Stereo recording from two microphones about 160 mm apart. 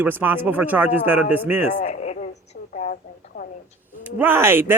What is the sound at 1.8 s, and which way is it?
Speech, 45° left (ahead or behind).